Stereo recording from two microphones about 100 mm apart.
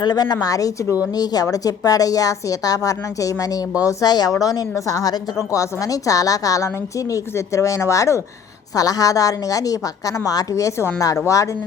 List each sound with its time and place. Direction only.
0.0 s a woman's voice: 40° left (ahead or behind); by 11.0 s 25° left (ahead or behind)